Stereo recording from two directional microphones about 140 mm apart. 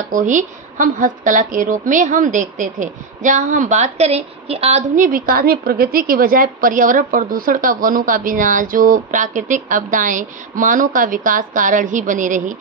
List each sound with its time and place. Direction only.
0.1 s a woman's voice: 65° right (ahead or behind); by 4.8 s 45° right (ahead or behind)
4.9 s a woman's voice: 80° right; by 12.5 s 65° right (ahead or behind)